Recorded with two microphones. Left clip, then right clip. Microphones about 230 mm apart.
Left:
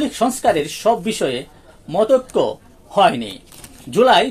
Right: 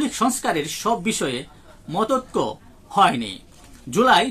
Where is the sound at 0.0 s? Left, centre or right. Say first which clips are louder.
Left 5 dB; centre.